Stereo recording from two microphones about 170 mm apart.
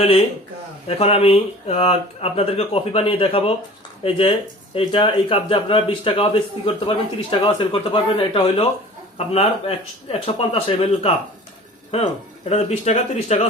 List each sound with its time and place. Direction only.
0.9 s speech: 35° left (ahead or behind)
12.5 s speech: 40° left (ahead or behind)